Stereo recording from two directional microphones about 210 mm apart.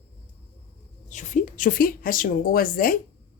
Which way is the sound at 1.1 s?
35° left (ahead or behind).